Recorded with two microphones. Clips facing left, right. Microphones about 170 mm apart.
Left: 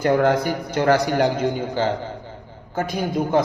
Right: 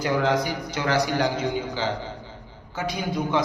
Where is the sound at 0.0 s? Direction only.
50° left (ahead or behind).